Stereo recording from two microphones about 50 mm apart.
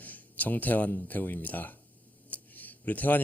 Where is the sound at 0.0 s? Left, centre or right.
Left.